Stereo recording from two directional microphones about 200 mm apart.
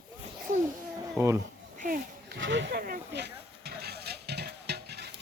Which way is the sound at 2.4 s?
65° right (ahead or behind).